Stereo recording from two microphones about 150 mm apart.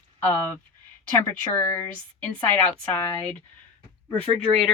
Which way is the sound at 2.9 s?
10° left (ahead or behind).